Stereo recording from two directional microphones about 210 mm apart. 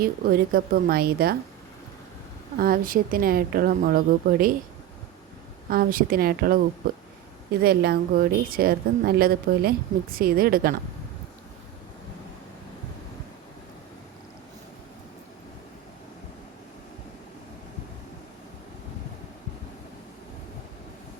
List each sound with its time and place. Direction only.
0.0 s a woman's voice: 45° right (ahead or behind)
2.6 s a woman's voice: 45° right (ahead or behind)
5.6 s a woman's voice: 45° right (ahead or behind)
7.6 s a woman's voice: 50° right (ahead or behind)